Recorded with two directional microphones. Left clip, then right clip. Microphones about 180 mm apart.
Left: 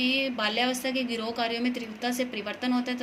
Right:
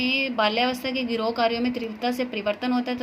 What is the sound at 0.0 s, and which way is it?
A woman's voice, 45° right (ahead or behind).